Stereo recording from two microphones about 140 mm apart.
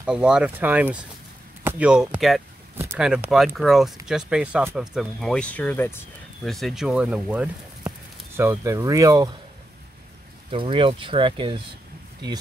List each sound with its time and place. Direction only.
0.0 s speech: 5° right (ahead or behind)
5.2 s speech: 5° left (ahead or behind)
6.4 s speech: centre (ahead or behind)
8.4 s speech: 20° right (ahead or behind)
10.5 s speech: 35° right (ahead or behind)